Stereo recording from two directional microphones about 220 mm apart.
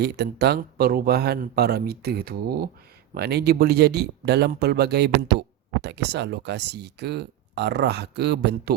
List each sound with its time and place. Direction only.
0.0 s speech: 50° right (ahead or behind)